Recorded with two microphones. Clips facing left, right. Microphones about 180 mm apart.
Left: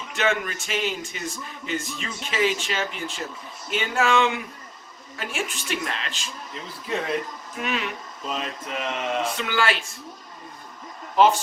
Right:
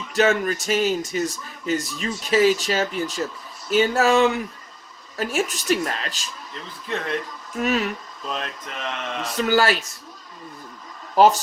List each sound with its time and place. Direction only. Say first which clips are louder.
0.1 s speech: right 6 dB; 40° right (ahead or behind)
6.5 s a sound: even; 5° left (ahead or behind)
7.6 s speech: right 6 dB; 40° right (ahead or behind)
8.3 s a sound: left 1 dB; 5° left (ahead or behind)
9.3 s speech: right 5 dB; 40° right (ahead or behind)
11.1 s speech: right 3 dB; 40° right (ahead or behind)